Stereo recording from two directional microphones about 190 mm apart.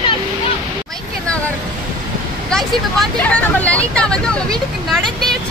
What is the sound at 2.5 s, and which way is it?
Speech, centre (ahead or behind).